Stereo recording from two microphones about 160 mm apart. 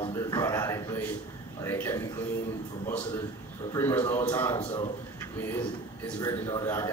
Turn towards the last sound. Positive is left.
turn(degrees=20)  # may be behind; listen again after turning